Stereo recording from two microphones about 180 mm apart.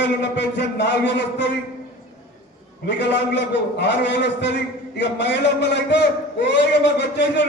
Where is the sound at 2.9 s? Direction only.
75° left (ahead or behind).